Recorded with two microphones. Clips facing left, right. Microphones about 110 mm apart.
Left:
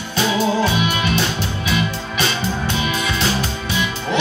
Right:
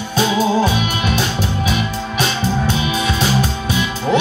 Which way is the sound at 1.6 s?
45° right (ahead or behind).